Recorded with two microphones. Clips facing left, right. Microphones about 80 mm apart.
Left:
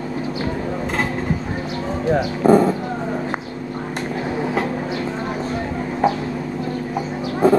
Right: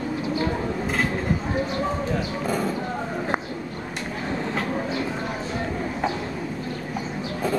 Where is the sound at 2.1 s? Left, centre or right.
Left.